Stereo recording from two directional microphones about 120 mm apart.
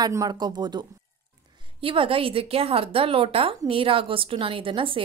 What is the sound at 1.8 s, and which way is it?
A woman's voice, 50° right (ahead or behind).